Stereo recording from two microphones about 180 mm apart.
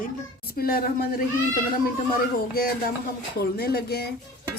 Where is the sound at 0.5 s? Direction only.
55° left (ahead or behind).